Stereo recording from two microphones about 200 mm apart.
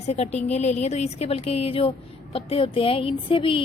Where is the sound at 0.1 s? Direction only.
35° left (ahead or behind).